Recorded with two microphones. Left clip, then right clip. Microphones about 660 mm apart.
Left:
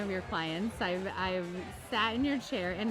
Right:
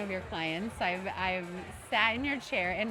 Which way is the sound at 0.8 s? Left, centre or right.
Right.